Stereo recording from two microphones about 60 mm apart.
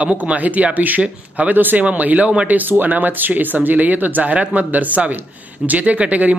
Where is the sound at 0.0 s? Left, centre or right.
Right.